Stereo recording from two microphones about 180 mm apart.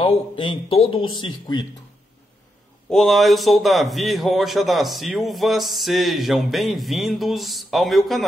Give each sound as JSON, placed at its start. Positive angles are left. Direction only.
{"t": 0.0, "sound": "speech", "side_deg": 30}
{"t": 2.9, "sound": "a man's voice", "side_deg": 0}